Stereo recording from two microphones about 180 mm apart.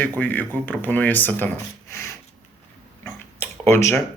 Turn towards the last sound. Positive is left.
turn(degrees=15)  # may be behind; listen again after turning